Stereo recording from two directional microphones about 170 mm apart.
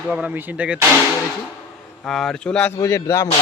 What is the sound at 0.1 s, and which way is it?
Speech, 10° right (ahead or behind).